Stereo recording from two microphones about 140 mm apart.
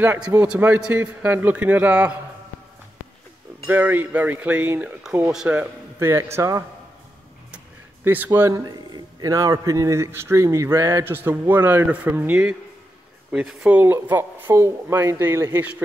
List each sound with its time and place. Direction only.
0.0 s speech: 15° right (ahead or behind)
3.6 s speech: 15° right (ahead or behind)